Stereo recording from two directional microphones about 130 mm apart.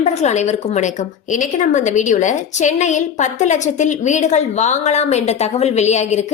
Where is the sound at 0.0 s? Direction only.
60° left (ahead or behind).